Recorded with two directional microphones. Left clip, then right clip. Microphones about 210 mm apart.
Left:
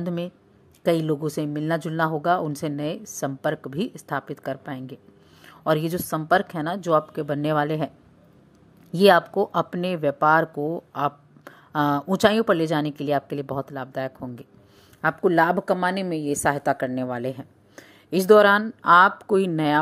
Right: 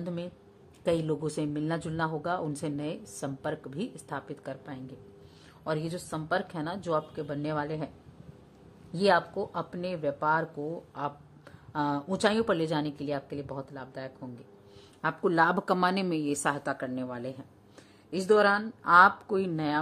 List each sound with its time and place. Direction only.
0.0 s speech: 20° left (ahead or behind)
8.9 s speech: 25° left (ahead or behind)
15.0 s speech: 15° left (ahead or behind)